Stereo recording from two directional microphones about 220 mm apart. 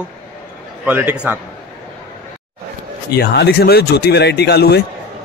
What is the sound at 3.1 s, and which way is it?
Speech, 50° left (ahead or behind).